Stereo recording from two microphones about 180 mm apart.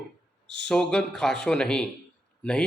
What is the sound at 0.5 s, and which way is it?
A man's voice, 5° left (ahead or behind).